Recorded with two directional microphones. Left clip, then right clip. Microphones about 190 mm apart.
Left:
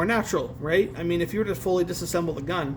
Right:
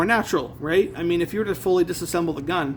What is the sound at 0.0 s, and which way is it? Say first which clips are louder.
A man's voice: right 4 dB; 40° right (ahead or behind).